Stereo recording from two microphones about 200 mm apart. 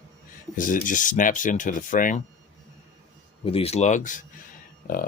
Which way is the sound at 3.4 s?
30° left (ahead or behind).